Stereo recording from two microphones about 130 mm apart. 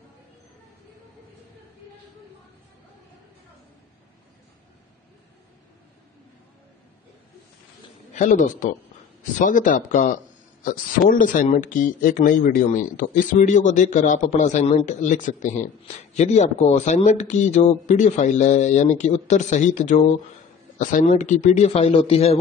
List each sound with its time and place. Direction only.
8.1 s a man's voice: 75° left (ahead or behind)
9.4 s speech: 90° left
10.6 s a man's voice: 90° left; by 15.5 s 75° left (ahead or behind)
16.2 s speech: 60° left (ahead or behind)
20.7 s speech: 80° left; by 22.4 s 50° left (ahead or behind)